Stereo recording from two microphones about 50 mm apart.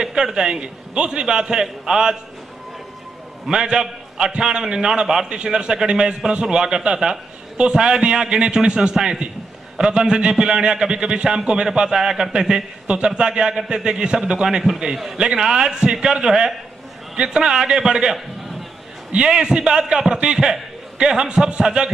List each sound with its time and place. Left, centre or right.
0.0 s a man's voice: centre
3.4 s a man's voice: centre
5.3 s a man's voice: centre
14.4 s a man's voice: centre
19.1 s a man's voice: centre